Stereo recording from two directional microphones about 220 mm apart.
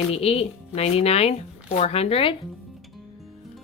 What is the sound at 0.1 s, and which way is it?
Speech, 25° left (ahead or behind).